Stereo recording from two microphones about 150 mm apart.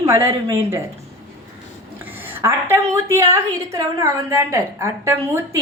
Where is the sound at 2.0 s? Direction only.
15° right (ahead or behind).